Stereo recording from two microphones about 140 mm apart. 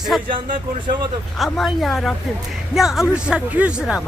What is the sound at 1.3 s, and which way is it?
Speech, centre (ahead or behind).